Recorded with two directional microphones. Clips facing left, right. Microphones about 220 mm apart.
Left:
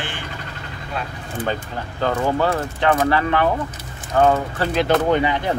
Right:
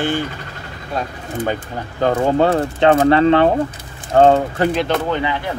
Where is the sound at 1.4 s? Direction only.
20° right (ahead or behind).